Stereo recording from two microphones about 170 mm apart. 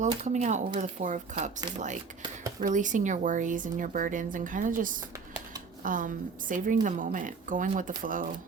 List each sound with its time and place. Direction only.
0.3 s a woman's voice: 45° right (ahead or behind)